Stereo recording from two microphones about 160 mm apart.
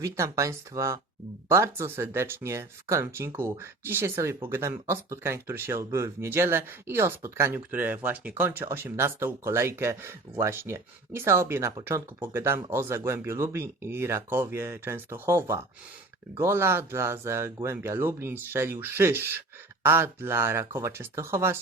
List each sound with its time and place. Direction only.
0.0 s speech: 20° right (ahead or behind)